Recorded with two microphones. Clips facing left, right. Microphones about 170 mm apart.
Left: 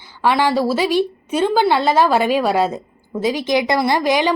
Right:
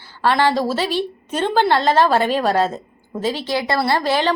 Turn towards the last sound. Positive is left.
turn(degrees=15)  # may be behind; listen again after turning